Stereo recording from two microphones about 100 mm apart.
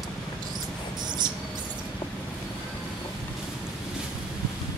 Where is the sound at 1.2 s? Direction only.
45° right (ahead or behind).